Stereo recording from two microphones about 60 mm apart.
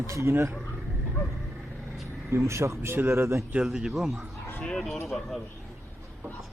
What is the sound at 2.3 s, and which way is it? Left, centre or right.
Speech, right.